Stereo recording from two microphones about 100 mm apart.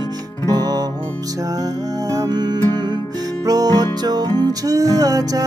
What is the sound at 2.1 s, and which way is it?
Music, 40° right (ahead or behind).